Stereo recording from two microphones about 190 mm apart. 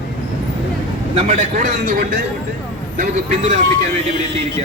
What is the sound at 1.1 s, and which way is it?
Speech, 35° right (ahead or behind).